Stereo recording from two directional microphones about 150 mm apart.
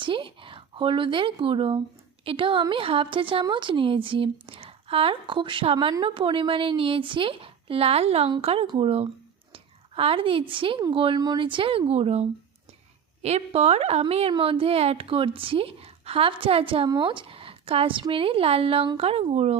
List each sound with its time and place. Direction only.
0.0 s a woman's voice: 35° right (ahead or behind)